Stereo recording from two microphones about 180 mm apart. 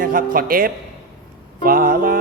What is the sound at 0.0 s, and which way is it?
Music, 50° right (ahead or behind).